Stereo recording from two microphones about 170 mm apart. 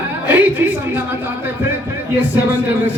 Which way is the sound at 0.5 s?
10° right (ahead or behind).